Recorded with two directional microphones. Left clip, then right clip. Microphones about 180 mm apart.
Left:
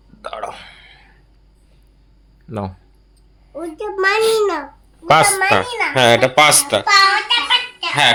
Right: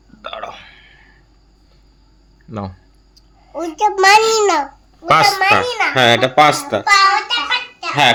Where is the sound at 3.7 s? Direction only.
65° right (ahead or behind).